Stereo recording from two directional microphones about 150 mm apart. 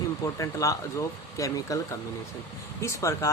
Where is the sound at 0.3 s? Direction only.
20° left (ahead or behind).